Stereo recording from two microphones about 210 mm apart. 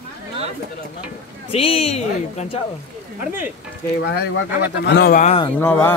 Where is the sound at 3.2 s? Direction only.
10° right (ahead or behind).